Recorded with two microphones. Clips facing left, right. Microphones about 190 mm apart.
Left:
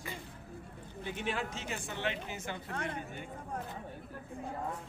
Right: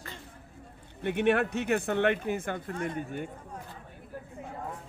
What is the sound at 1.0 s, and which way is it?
Speech, 65° right (ahead or behind).